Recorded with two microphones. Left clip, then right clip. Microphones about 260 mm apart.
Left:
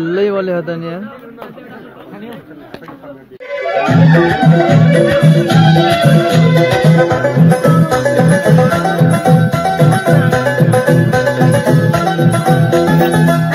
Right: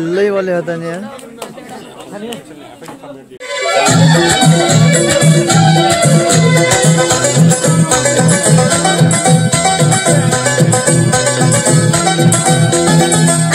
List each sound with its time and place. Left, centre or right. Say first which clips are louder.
0.4 s speech: right 2 dB; centre
3.4 s music: right 3 dB; right
6.7 s music: even; right
7.6 s music: left 1 dB; right